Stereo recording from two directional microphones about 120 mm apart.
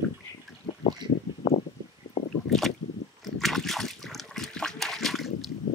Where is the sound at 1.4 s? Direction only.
40° left (ahead or behind).